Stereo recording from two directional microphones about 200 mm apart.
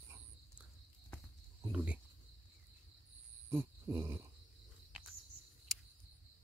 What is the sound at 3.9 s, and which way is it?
Speech, 15° right (ahead or behind).